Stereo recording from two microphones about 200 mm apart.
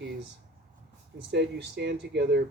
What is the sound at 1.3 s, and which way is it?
Speech, 55° right (ahead or behind).